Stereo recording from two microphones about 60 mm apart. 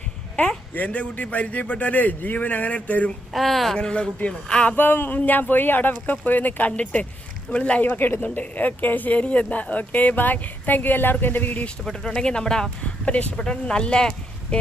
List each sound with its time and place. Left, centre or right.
0.3 s a man's voice: left
3.3 s speech: centre
4.8 s speech: left; by 7.8 s centre
7.8 s speech: left
11.9 s speech: centre